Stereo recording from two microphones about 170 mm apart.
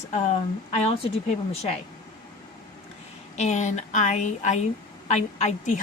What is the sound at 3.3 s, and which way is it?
Speech, 40° left (ahead or behind).